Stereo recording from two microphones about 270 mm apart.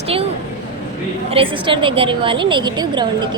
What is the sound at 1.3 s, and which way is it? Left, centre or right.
A woman's voice, centre.